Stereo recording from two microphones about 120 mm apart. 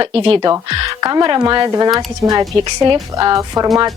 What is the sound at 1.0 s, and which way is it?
A woman's voice, 30° right (ahead or behind).